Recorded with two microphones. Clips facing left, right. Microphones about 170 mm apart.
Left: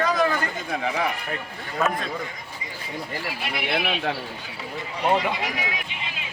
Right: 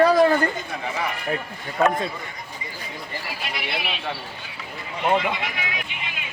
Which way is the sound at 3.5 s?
50° left (ahead or behind).